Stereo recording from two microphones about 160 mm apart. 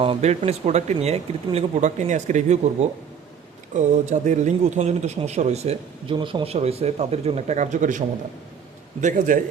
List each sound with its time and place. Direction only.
0.0 s speech: 40° right (ahead or behind)
6.1 s a man's voice: 30° right (ahead or behind); by 9.4 s 55° right (ahead or behind)